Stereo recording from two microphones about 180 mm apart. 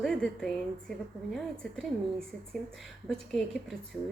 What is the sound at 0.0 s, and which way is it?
A woman's voice, centre (ahead or behind).